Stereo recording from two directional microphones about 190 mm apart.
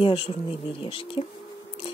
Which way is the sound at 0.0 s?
30° left (ahead or behind).